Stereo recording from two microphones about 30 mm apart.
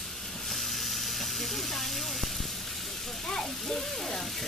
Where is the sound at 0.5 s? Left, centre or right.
Centre.